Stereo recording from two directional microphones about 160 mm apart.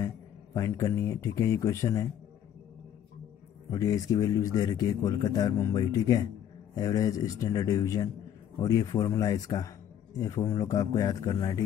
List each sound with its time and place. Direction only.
0.6 s a man's voice: 20° left (ahead or behind)
3.7 s a man's voice: 20° left (ahead or behind)